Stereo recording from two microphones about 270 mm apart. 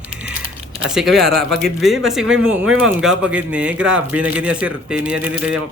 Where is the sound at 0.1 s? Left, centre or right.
Centre.